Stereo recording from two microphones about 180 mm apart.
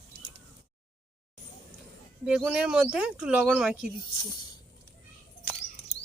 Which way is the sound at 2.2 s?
5° right (ahead or behind).